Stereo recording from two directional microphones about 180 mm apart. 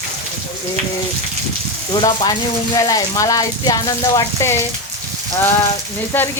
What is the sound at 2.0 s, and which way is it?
Speech, 20° left (ahead or behind).